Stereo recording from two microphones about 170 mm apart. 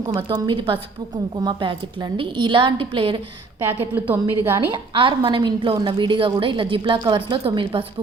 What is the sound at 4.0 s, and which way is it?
Speech, 10° right (ahead or behind).